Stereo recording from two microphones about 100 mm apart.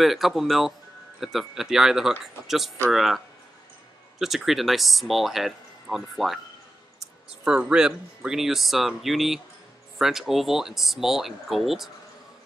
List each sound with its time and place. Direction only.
0.0 s speech: centre (ahead or behind)
4.2 s speech: centre (ahead or behind)